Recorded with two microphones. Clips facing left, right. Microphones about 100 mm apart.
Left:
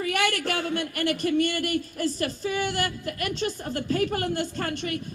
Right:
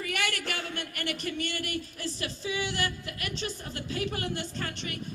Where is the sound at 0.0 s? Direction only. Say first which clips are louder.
Left 7 dB; 50° left (ahead or behind).